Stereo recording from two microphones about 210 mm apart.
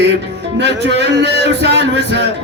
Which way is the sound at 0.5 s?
55° right (ahead or behind).